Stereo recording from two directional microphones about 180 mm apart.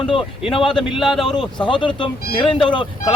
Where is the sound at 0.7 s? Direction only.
Centre (ahead or behind).